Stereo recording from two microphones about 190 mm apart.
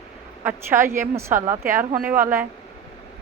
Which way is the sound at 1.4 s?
45° right (ahead or behind).